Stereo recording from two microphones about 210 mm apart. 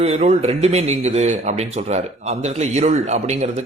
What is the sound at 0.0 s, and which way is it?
Speech, 30° right (ahead or behind).